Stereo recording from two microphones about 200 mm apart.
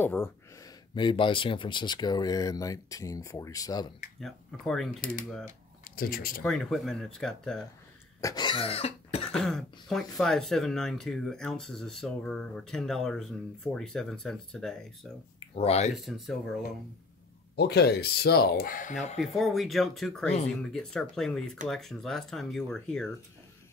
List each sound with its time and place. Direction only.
0.0 s speech: 10° left (ahead or behind)
0.9 s speech: 25° left (ahead or behind)
4.2 s speech: centre (ahead or behind)
5.9 s speech: 45° left (ahead or behind)
6.4 s speech: centre (ahead or behind)
8.2 s speech: 20° left (ahead or behind)
9.2 s speech: centre (ahead or behind)
15.5 s speech: 30° left (ahead or behind)
16.0 s speech: centre (ahead or behind)
17.6 s speech: 55° left (ahead or behind)
19.1 s speech: centre (ahead or behind)